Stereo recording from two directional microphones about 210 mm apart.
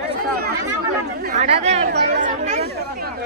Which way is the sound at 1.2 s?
35° right (ahead or behind).